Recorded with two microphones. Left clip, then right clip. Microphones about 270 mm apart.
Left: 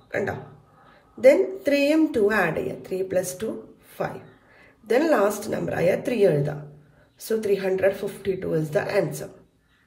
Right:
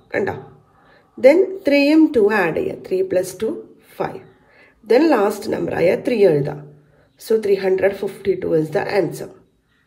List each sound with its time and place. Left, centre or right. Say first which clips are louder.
0.1 s a man's voice: right 6 dB; centre
4.9 s speech: right 5 dB; centre